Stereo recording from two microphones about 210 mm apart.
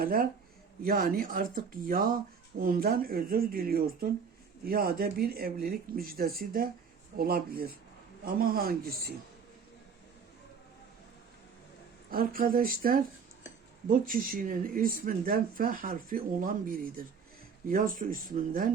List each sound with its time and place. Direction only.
0.0 s speech: 45° right (ahead or behind)
12.1 s speech: 45° right (ahead or behind)